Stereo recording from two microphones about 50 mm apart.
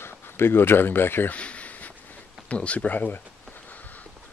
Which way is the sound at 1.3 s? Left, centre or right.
Left.